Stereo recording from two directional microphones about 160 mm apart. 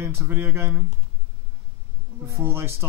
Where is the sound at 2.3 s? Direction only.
15° right (ahead or behind).